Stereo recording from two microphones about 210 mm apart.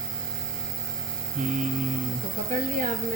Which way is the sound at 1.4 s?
35° right (ahead or behind).